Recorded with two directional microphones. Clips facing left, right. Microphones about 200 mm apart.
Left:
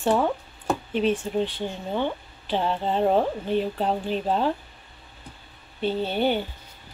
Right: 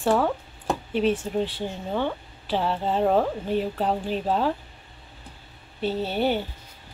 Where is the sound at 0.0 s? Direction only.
15° left (ahead or behind).